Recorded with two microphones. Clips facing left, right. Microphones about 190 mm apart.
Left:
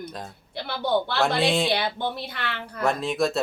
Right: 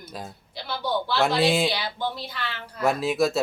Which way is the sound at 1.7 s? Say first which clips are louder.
Left 2 dB; 60° left (ahead or behind).